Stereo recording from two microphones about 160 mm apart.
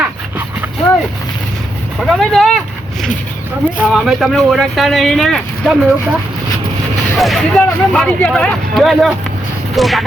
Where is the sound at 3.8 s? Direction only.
Centre (ahead or behind).